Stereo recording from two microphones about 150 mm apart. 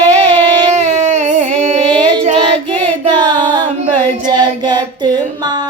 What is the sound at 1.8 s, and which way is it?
Child singing, 30° right (ahead or behind).